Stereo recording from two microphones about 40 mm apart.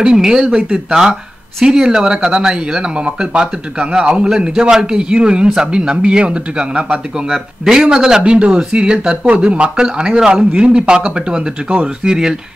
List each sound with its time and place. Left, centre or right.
0.0 s speech: centre